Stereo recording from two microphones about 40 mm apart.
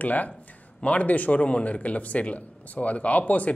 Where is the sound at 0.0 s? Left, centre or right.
Left.